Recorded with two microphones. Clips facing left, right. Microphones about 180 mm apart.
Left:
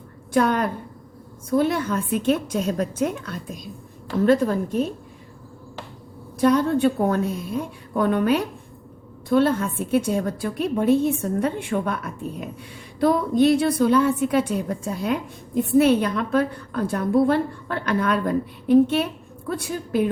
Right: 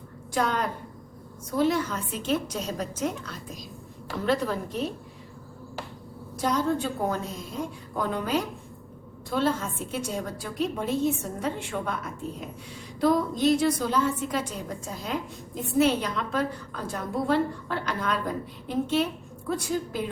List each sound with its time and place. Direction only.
0.3 s a woman's voice: 55° left (ahead or behind)
6.4 s a woman's voice: 60° left (ahead or behind)